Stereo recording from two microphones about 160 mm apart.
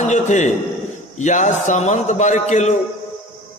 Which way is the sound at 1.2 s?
50° left (ahead or behind).